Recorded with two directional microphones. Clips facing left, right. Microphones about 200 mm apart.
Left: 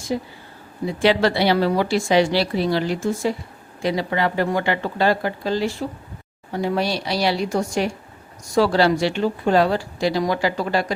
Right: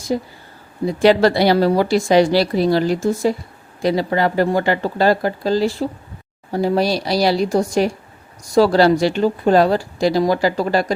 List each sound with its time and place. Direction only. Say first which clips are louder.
0.1 s a woman's voice: right 3 dB; 40° right (ahead or behind)